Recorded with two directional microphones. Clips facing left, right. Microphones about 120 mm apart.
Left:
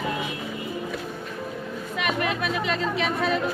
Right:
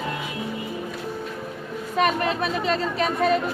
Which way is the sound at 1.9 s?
35° right (ahead or behind).